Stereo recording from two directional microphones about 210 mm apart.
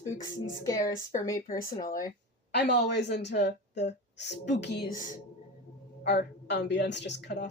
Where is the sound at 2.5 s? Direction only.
55° left (ahead or behind).